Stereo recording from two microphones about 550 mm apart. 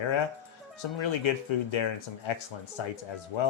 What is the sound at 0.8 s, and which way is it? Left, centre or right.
Speech, left.